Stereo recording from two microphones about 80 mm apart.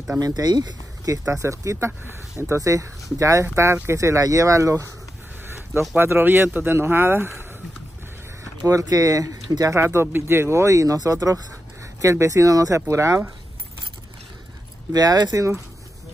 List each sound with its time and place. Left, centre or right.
0.2 s speech: right
1.3 s speech: right
5.8 s speech: right
8.6 s speech: right
14.9 s speech: right